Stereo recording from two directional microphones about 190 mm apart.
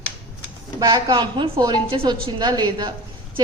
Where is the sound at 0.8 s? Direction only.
20° right (ahead or behind).